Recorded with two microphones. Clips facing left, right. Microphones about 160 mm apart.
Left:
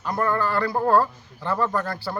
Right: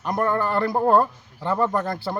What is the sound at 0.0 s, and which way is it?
A man's voice, 20° right (ahead or behind).